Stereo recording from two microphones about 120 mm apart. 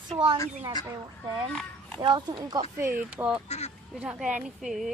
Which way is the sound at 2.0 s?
40° right (ahead or behind).